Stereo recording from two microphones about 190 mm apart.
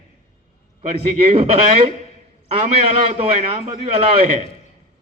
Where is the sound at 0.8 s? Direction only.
30° right (ahead or behind).